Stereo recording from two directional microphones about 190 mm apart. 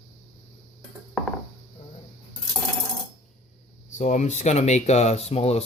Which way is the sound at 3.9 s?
40° left (ahead or behind).